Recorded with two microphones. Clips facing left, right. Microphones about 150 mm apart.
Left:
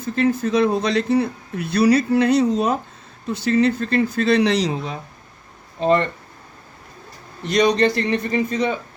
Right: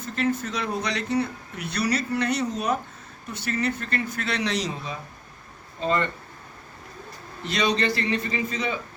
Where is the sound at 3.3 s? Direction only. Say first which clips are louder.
Left 10 dB; 80° left.